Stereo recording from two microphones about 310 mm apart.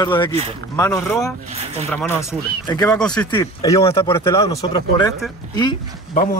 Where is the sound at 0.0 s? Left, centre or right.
Centre.